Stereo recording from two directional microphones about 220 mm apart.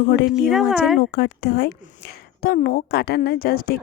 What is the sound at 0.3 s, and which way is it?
Speech, centre (ahead or behind).